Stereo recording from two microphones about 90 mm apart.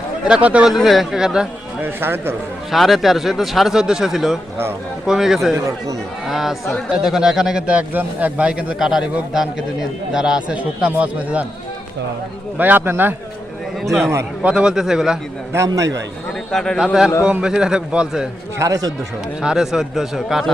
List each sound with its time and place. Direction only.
0.3 s a man's voice: 10° right (ahead or behind)
0.7 s speech: centre (ahead or behind)
1.8 s a man's voice: 25° right (ahead or behind)
2.7 s a man's voice: centre (ahead or behind)
12.5 s a man's voice: 20° right (ahead or behind)
14.4 s a man's voice: 10° right (ahead or behind)
15.5 s a man's voice: 35° right (ahead or behind)
16.5 s speech: 5° left (ahead or behind)
16.8 s a man's voice: 5° right (ahead or behind)
18.6 s a man's voice: 40° right (ahead or behind)
19.4 s speech: 5° right (ahead or behind)